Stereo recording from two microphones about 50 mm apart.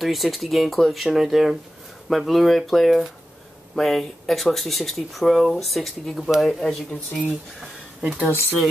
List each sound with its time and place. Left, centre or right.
0.0 s speech: centre
7.2 s speech: centre
8.3 s speech: left